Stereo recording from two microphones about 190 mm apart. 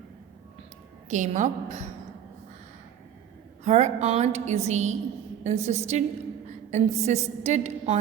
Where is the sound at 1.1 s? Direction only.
40° right (ahead or behind).